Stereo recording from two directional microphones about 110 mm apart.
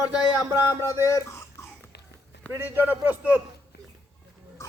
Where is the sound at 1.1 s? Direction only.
25° left (ahead or behind).